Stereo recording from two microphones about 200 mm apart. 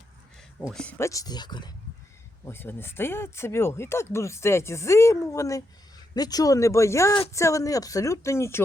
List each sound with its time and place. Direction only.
0.6 s speech: 5° left (ahead or behind); by 1.7 s 20° left (ahead or behind)
2.4 s speech: 10° left (ahead or behind)